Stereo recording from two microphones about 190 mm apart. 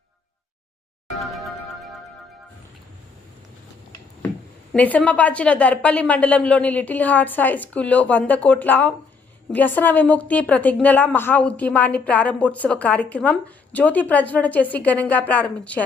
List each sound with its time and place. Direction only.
1.1 s music: centre (ahead or behind)
4.7 s a woman's voice: 5° left (ahead or behind)